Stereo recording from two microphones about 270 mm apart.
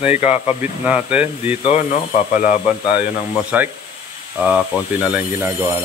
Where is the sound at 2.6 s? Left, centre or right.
Centre.